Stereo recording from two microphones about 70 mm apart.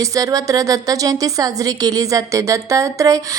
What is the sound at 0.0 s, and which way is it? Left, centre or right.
A woman's voice, right.